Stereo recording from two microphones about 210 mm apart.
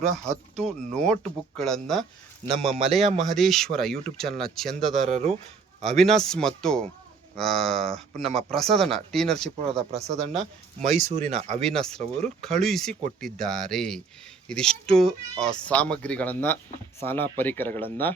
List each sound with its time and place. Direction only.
0.3 s speech: 5° left (ahead or behind)
5.0 s speech: 30° right (ahead or behind)
5.8 s speech: centre (ahead or behind)
9.9 s speech: 30° right (ahead or behind)
11.6 s speech: centre (ahead or behind)